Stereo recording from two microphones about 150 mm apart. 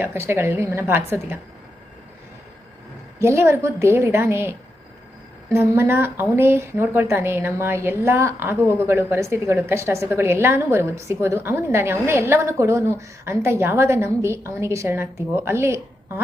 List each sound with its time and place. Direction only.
0.0 s a woman's voice: 15° right (ahead or behind)
3.2 s a woman's voice: 15° right (ahead or behind)